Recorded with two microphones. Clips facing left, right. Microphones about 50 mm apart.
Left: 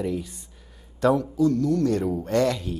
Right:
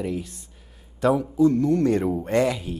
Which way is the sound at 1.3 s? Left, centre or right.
Right.